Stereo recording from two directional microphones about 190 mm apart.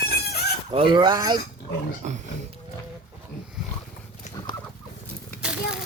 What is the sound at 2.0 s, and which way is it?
Speech, 40° right (ahead or behind).